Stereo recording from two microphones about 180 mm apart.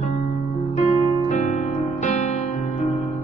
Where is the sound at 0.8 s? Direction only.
35° left (ahead or behind).